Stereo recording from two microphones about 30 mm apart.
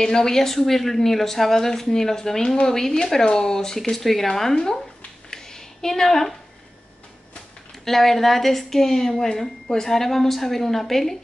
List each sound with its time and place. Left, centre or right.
0.0 s a woman's voice: centre
3.9 s a woman's voice: centre
5.3 s a sound: left
7.8 s a woman's voice: centre